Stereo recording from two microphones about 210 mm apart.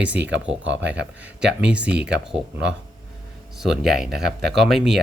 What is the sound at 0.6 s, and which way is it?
Speech, 60° right (ahead or behind).